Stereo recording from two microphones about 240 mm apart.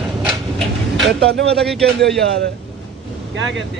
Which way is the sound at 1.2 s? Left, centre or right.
Right.